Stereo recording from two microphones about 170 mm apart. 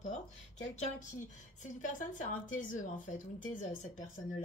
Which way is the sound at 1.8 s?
50° left (ahead or behind).